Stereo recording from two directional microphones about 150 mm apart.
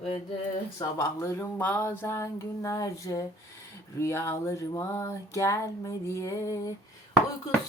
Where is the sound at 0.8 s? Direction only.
20° left (ahead or behind).